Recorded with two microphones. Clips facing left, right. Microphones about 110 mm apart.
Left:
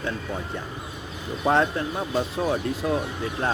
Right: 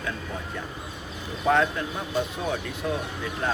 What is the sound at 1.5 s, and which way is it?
Speech, 30° left (ahead or behind).